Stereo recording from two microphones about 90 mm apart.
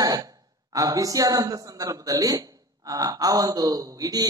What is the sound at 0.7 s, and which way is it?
A woman's voice, 40° right (ahead or behind).